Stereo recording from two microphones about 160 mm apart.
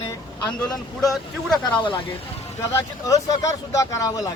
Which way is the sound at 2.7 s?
20° left (ahead or behind).